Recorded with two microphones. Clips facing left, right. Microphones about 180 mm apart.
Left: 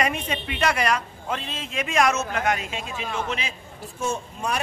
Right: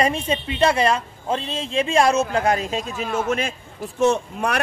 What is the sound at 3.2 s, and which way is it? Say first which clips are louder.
Speech: right 7 dB; 50° right (ahead or behind).